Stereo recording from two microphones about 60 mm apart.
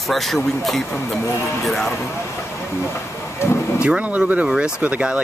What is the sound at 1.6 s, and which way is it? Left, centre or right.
Speech, centre.